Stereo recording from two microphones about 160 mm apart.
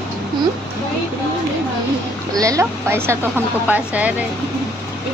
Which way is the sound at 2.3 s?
20° right (ahead or behind).